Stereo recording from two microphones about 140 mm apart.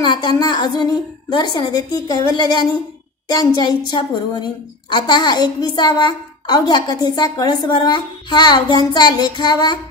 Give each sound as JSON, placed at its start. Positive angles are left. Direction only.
{"t": 0.0, "sound": "a woman's voice", "side_deg": 30}